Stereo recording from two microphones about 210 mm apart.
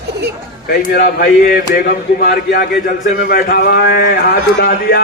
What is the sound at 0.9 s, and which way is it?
A man's voice, 45° left (ahead or behind).